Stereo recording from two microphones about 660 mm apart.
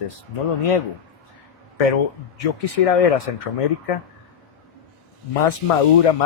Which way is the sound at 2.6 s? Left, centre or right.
Left.